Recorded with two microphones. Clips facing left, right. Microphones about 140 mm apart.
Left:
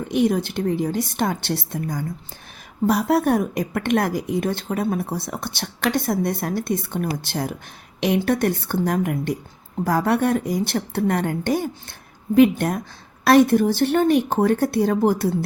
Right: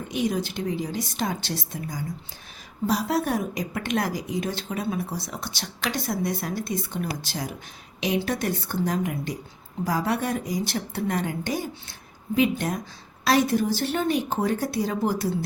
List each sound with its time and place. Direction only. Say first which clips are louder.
0.1 s a woman's voice: left 6 dB; 60° left (ahead or behind)